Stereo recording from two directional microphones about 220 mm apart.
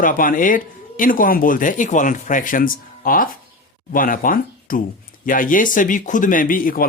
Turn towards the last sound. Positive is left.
turn(degrees=40)  # may be behind; listen again after turning